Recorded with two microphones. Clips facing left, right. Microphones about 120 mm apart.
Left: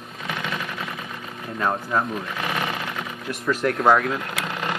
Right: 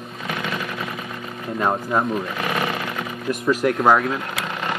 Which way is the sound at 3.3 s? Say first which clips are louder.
Right 4 dB; 10° right (ahead or behind).